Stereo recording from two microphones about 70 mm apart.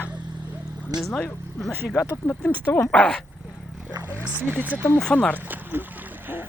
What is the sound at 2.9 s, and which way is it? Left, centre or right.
Speech, centre.